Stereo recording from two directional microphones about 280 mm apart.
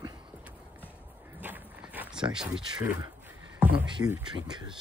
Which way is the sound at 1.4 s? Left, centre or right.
Centre.